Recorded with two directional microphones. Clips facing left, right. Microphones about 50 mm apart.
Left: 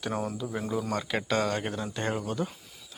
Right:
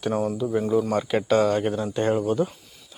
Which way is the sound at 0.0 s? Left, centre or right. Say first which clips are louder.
Right 7 dB; centre.